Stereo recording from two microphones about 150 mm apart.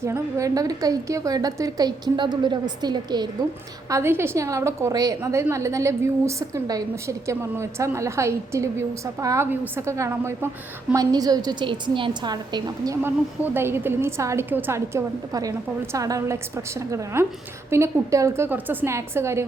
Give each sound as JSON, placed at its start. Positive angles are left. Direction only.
{"t": 0.0, "sound": "a woman's voice", "side_deg": -20}
{"t": 13.0, "sound": "a woman's voice", "side_deg": -15}